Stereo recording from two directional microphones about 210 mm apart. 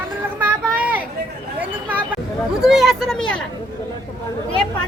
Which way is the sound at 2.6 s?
Centre (ahead or behind).